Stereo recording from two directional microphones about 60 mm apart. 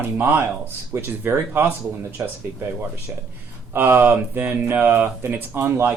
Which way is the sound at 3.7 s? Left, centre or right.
Right.